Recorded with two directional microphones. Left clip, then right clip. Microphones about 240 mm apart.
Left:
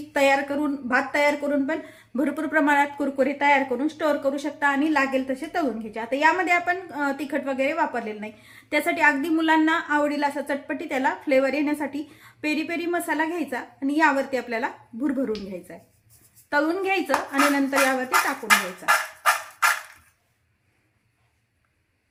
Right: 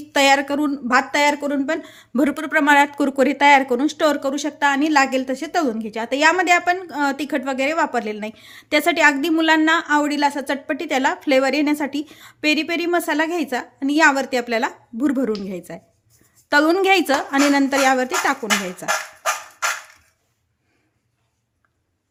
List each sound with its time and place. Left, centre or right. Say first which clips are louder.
0.1 s speech: right 5 dB; right